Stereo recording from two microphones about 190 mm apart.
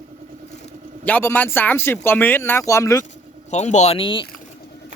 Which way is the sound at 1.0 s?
10° left (ahead or behind).